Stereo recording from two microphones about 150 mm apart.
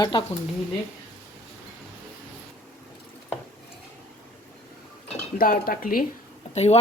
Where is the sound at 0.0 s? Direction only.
35° left (ahead or behind).